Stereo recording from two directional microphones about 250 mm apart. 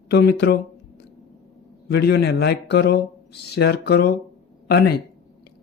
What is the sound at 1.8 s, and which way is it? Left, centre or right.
Speech, left.